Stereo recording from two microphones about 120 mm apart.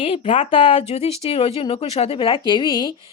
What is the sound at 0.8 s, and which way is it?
A woman's voice, 60° left (ahead or behind).